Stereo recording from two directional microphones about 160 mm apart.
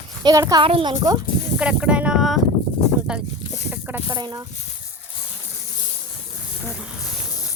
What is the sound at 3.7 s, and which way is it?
Chicken, 15° right (ahead or behind).